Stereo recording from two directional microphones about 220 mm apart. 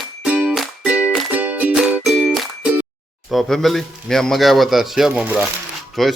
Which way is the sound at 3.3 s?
Centre (ahead or behind).